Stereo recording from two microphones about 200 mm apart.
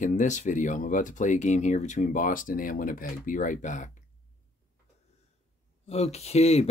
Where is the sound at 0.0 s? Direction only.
35° left (ahead or behind).